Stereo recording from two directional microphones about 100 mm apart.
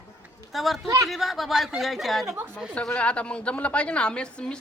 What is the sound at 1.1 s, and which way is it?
Speech, centre (ahead or behind).